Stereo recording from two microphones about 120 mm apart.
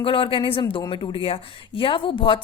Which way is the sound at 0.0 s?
45° left (ahead or behind).